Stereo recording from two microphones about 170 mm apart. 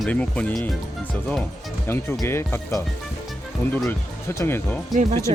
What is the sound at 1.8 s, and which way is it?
Speech, 15° left (ahead or behind).